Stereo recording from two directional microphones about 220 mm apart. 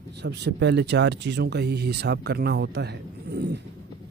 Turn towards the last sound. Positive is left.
turn(degrees=-50)  # may be behind; listen again after turning